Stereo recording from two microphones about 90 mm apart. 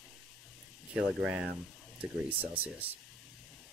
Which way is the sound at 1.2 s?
10° right (ahead or behind).